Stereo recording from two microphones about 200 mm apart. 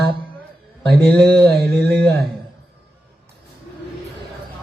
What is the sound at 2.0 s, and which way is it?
Speech, 55° right (ahead or behind).